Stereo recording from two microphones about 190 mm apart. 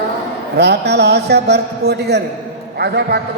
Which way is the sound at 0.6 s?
60° right (ahead or behind).